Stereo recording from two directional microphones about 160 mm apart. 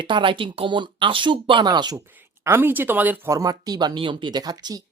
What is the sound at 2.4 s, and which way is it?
Speech, 15° right (ahead or behind).